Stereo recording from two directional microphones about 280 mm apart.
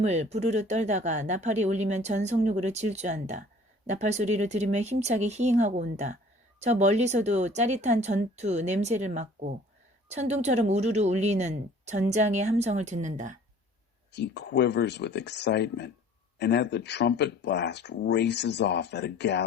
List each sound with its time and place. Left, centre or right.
0.0 s speech: right
14.1 s speech: left